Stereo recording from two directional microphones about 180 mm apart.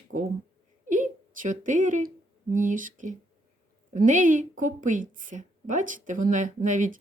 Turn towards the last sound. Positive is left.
turn(degrees=-45)  # may be behind; listen again after turning